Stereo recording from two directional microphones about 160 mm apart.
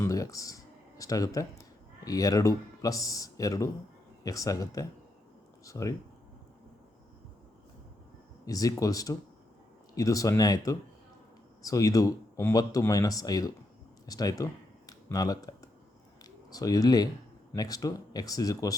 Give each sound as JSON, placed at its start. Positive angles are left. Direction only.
{"t": 0.0, "sound": "speech", "side_deg": 20}
{"t": 8.4, "sound": "speech", "side_deg": 20}
{"t": 14.1, "sound": "a sound", "side_deg": 25}
{"t": 16.5, "sound": "speech", "side_deg": 25}